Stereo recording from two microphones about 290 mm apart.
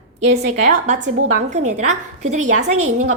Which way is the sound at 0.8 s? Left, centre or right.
Right.